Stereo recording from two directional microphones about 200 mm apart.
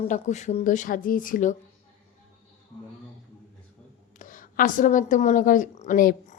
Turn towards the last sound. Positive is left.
turn(degrees=40)  # may be behind; listen again after turning